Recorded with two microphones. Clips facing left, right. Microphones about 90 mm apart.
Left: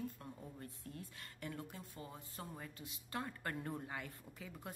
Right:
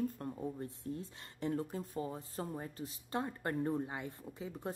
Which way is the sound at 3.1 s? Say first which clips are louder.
Right 6 dB; 25° right (ahead or behind).